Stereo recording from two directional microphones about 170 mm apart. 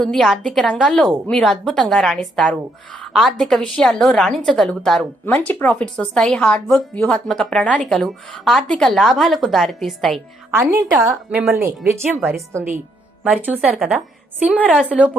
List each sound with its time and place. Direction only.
0.0 s speech: centre (ahead or behind)
10.6 s a woman's voice: 15° right (ahead or behind)